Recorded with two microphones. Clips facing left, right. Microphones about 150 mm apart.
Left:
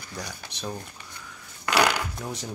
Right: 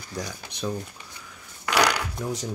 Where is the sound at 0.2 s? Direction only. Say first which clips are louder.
Right 5 dB; 55° right (ahead or behind).